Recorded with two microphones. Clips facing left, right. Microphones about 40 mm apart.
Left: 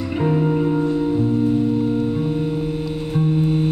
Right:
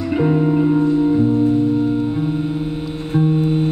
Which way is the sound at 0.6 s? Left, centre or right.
Centre.